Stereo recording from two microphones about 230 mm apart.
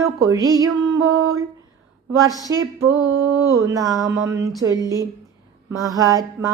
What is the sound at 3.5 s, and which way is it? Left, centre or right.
A woman's voice, centre.